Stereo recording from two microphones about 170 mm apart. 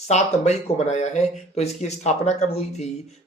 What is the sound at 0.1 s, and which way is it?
Speech, 40° left (ahead or behind).